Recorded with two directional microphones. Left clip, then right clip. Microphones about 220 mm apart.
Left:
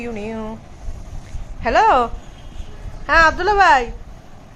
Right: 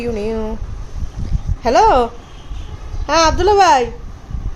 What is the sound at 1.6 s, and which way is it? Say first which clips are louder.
Speech: right 2 dB; 10° right (ahead or behind).